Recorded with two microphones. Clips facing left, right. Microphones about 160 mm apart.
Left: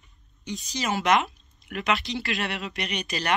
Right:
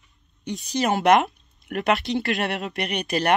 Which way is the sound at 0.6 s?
60° right (ahead or behind).